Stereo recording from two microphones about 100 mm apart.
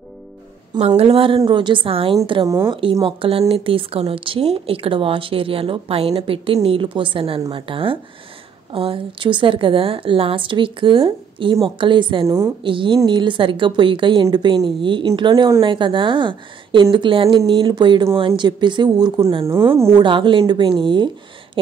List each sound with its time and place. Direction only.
0.7 s a woman's voice: 85° right; by 1.4 s 65° right (ahead or behind)
1.5 s a woman's voice: 55° right (ahead or behind)
2.4 s speech: 30° right (ahead or behind)
2.7 s a woman's voice: 60° right (ahead or behind); by 19.2 s 45° right (ahead or behind)
19.4 s a woman's voice: 25° right (ahead or behind)
20.0 s a woman's voice: 55° right (ahead or behind)